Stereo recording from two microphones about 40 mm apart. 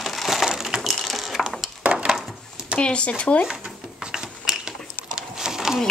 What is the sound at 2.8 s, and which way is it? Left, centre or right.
Speech, left.